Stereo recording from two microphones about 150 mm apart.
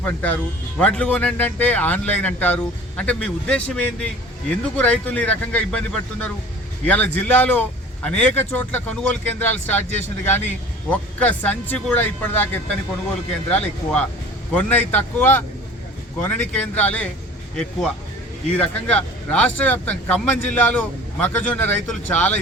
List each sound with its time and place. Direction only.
0.0 s speech: 10° left (ahead or behind)
13.5 s speech: 10° left (ahead or behind)